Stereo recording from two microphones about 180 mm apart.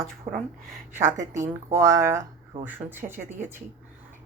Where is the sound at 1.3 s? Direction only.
15° right (ahead or behind).